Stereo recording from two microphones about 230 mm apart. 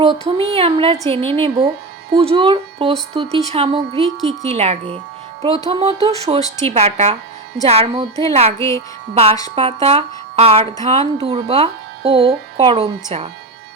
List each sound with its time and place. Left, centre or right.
0.0 s speech: right
8.5 s speech: centre
9.1 s speech: right